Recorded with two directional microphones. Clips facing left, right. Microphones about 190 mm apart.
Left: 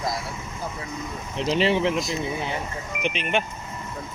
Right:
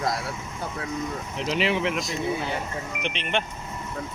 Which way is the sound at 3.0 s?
10° left (ahead or behind).